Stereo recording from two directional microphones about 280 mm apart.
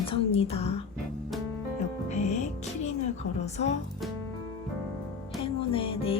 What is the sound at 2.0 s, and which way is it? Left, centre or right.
Music, left.